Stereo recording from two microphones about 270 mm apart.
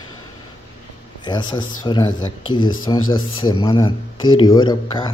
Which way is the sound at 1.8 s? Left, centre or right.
Centre.